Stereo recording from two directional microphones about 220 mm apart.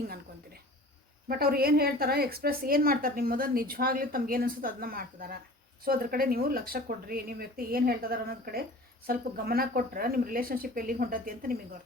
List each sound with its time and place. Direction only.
1.3 s a woman's voice: 45° right (ahead or behind)